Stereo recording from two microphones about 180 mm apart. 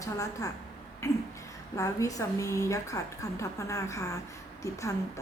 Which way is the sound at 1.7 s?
15° left (ahead or behind).